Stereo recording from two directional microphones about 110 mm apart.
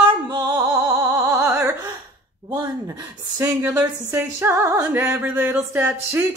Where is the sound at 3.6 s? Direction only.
15° right (ahead or behind).